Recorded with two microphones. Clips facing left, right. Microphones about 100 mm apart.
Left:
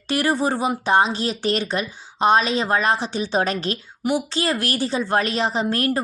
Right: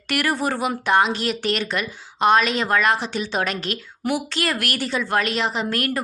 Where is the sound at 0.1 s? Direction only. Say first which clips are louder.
Left 2 dB; 30° left (ahead or behind).